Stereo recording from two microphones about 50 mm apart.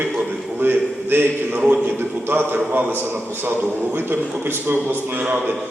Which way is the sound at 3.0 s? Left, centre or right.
Right.